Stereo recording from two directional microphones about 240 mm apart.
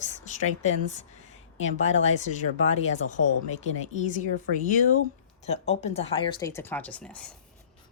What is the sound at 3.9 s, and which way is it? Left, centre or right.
Speech, left.